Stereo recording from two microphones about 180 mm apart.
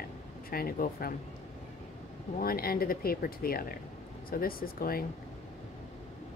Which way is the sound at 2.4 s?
55° left (ahead or behind).